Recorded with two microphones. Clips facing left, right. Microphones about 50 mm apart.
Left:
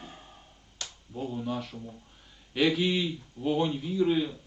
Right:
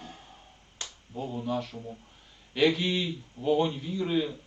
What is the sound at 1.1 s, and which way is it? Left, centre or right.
A man's voice, centre.